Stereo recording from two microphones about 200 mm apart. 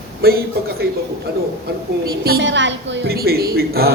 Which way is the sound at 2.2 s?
60° right (ahead or behind).